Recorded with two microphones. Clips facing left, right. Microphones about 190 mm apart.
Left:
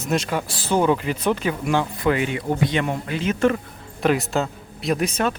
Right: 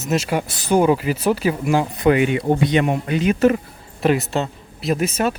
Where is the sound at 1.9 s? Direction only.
20° right (ahead or behind).